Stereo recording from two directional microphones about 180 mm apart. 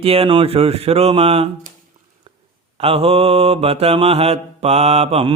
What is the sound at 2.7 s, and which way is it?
Mantra, 30° right (ahead or behind).